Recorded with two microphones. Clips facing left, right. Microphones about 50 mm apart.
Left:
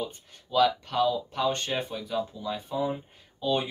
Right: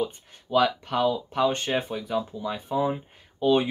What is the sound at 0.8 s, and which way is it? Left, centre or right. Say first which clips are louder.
Speech: right 1 dB; right.